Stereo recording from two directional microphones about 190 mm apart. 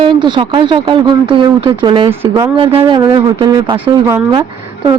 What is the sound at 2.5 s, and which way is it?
Speech, 30° right (ahead or behind).